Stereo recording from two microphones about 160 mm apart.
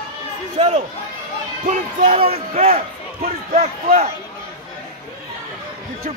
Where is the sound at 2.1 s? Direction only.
35° right (ahead or behind).